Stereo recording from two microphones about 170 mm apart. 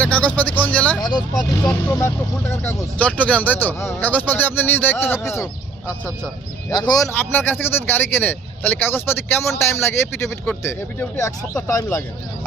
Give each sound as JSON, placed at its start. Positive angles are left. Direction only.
{"t": 0.0, "sound": "speech", "side_deg": 10}
{"t": 1.0, "sound": "speech", "side_deg": 25}
{"t": 6.7, "sound": "speech", "side_deg": 25}
{"t": 7.2, "sound": "speech", "side_deg": 10}